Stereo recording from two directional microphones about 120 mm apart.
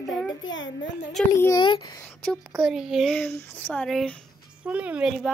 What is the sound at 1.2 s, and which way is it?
Speech, 5° left (ahead or behind).